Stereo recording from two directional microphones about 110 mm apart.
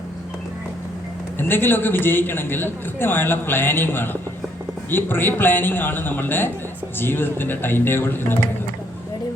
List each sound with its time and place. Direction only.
1.4 s a man's voice: 20° left (ahead or behind)